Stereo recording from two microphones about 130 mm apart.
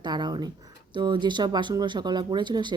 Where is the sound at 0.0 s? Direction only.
35° right (ahead or behind).